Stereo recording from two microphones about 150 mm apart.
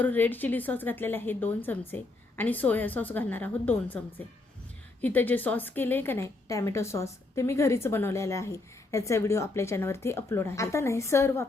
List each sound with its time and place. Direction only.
0.0 s a woman's voice: 10° left (ahead or behind)